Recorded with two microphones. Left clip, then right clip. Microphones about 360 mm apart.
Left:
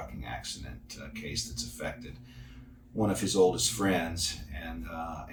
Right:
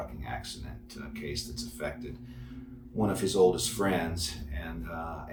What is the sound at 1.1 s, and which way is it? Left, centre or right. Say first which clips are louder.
Speech: left 1 dB; centre.